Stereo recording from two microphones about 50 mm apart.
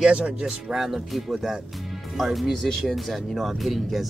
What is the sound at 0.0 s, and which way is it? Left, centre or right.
Speech, centre.